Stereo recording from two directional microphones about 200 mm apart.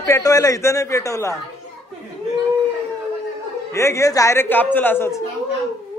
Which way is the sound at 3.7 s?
15° left (ahead or behind).